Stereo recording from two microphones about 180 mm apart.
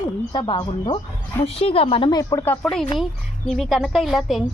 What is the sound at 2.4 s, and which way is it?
A woman's voice, 10° left (ahead or behind).